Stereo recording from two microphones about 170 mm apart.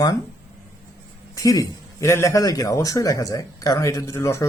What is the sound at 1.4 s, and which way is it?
Speech, 20° left (ahead or behind).